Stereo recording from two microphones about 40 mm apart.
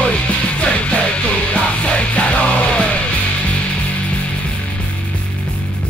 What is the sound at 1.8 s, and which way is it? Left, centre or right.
Music, left.